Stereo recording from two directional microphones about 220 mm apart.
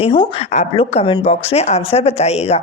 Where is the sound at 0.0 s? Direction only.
25° left (ahead or behind).